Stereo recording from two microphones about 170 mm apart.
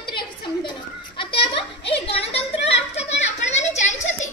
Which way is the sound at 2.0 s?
35° left (ahead or behind).